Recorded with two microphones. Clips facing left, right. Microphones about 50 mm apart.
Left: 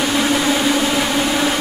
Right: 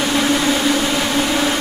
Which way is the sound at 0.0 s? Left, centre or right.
Centre.